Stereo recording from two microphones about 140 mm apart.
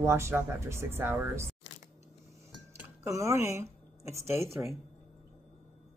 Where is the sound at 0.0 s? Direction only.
20° right (ahead or behind).